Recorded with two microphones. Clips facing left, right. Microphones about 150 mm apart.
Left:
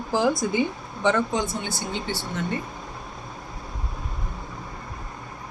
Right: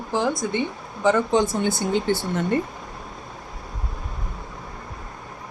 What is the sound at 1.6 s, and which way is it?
Speech, 50° right (ahead or behind).